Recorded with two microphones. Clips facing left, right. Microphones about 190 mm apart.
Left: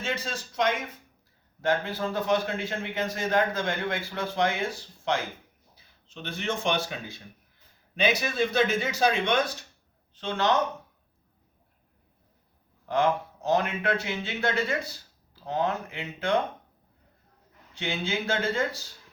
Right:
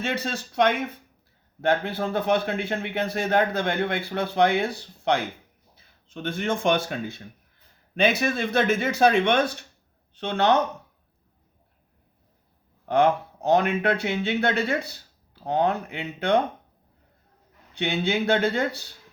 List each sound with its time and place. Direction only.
0.0 s speech: 60° right (ahead or behind)
5.7 s speech: 50° right (ahead or behind)
8.2 s speech: 55° right (ahead or behind)
12.8 s speech: 60° right (ahead or behind)
17.7 s speech: 60° right (ahead or behind)